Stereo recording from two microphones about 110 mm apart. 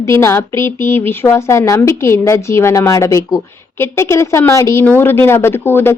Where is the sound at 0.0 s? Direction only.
25° left (ahead or behind).